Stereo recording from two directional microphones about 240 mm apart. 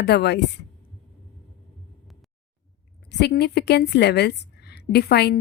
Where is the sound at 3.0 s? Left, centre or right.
Left.